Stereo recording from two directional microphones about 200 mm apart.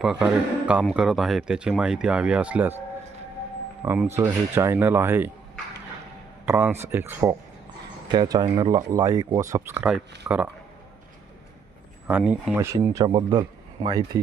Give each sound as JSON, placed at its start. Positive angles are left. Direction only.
{"t": 0.0, "sound": "speech", "side_deg": -5}
{"t": 3.8, "sound": "speech", "side_deg": -10}
{"t": 6.4, "sound": "speech", "side_deg": -10}
{"t": 12.0, "sound": "speech", "side_deg": -5}